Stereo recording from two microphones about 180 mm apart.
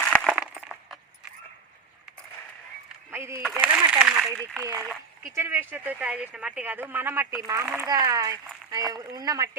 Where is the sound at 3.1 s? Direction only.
15° right (ahead or behind).